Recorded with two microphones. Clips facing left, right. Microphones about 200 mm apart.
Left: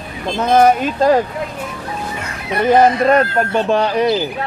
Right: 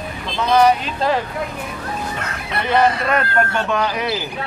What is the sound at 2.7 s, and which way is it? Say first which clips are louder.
Speech: left 6 dB; 40° left (ahead or behind).